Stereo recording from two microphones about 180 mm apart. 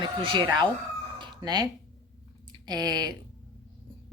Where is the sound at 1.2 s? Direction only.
20° right (ahead or behind).